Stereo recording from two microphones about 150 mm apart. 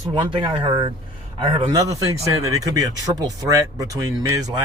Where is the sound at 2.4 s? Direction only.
25° right (ahead or behind).